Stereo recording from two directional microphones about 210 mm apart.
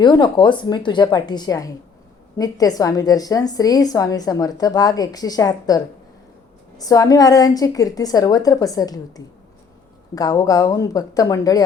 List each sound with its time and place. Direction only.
0.0 s a woman's voice: 20° left (ahead or behind)